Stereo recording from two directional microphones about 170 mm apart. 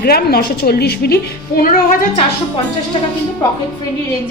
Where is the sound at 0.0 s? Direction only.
65° left (ahead or behind).